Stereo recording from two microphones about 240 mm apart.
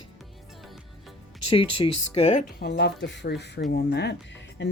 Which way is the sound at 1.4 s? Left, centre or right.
Left.